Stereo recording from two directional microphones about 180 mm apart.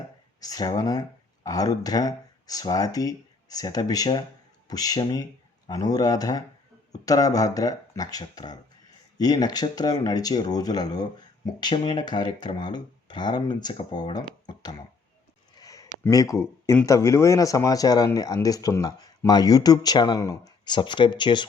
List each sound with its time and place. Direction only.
0.3 s speech: 20° left (ahead or behind)
15.5 s a sound: 20° left (ahead or behind)
16.0 s speech: 15° left (ahead or behind)